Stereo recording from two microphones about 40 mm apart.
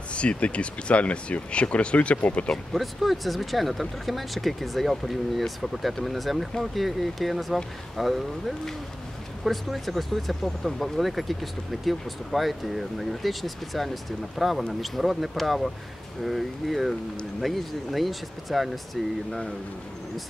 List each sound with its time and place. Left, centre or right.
0.1 s speech: left
2.5 s speech: centre